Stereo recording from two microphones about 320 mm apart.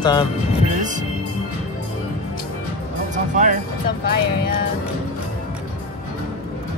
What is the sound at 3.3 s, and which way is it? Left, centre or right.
Speech, right.